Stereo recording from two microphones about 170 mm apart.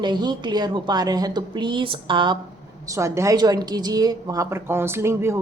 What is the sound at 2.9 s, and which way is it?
A woman's voice, 15° right (ahead or behind).